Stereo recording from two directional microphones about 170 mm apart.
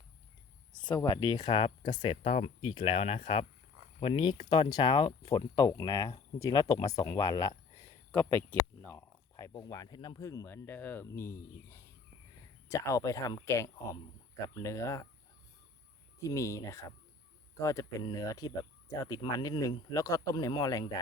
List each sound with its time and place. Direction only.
0.9 s speech: 25° left (ahead or behind)
2.2 s speech: 35° left (ahead or behind); by 15.0 s 20° left (ahead or behind)
16.2 s speech: 15° left (ahead or behind)